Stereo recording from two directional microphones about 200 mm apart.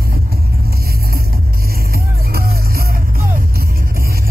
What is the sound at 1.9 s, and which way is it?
Music, 50° right (ahead or behind).